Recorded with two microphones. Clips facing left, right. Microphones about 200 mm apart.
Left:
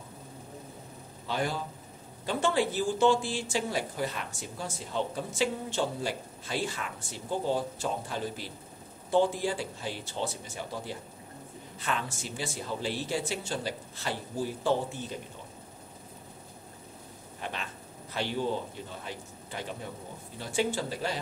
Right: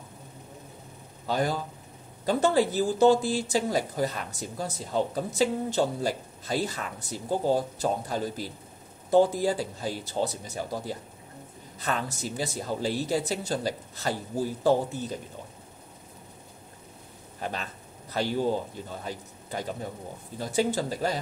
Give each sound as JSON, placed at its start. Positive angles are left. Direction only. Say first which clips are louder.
{"t": 1.2, "sound": "a man's voice", "louder": "right 4 dB", "side_deg": -40}
{"t": 17.4, "sound": "a sound", "louder": "right 4 dB", "side_deg": -40}
{"t": 18.1, "sound": "speech", "louder": "right 4 dB", "side_deg": -40}
{"t": 19.5, "sound": "speech", "louder": "right 5 dB", "side_deg": -45}